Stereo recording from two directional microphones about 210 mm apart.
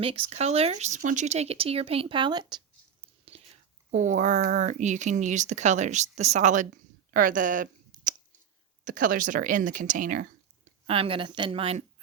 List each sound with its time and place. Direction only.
0.0 s speech: 25° right (ahead or behind)
10.8 s speech: 25° right (ahead or behind)